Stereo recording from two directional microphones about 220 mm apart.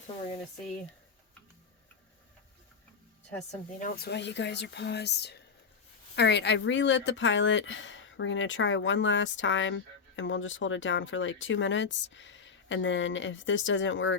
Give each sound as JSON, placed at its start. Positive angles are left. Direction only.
{"t": 3.8, "sound": "speech", "side_deg": 40}